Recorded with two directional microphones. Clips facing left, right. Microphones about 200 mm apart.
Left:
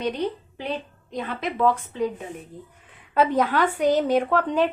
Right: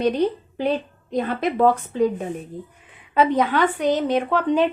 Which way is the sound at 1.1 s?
40° right (ahead or behind).